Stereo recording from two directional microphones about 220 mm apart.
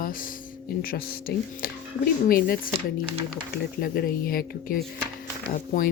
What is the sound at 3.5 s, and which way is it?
Speech, 45° left (ahead or behind).